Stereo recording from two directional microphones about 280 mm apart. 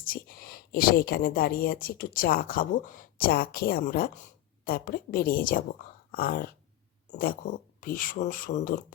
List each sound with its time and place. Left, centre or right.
0.0 s a woman's voice: left
6.1 s a sound: left
7.1 s speech: left